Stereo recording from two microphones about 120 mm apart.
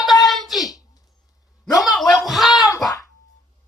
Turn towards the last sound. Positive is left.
turn(degrees=30)  # may be behind; listen again after turning